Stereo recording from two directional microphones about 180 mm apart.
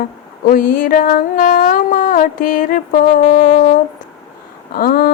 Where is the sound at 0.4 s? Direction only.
50° left (ahead or behind).